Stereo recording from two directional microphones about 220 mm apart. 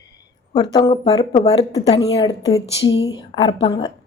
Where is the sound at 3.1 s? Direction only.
20° left (ahead or behind).